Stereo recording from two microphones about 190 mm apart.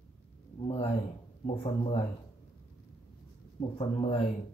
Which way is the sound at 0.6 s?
30° left (ahead or behind).